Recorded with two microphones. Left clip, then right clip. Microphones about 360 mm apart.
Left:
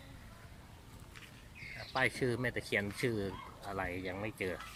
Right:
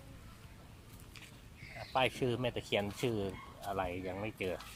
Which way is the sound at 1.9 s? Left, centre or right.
Centre.